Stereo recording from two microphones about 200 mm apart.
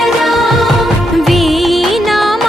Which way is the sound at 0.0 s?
Centre (ahead or behind).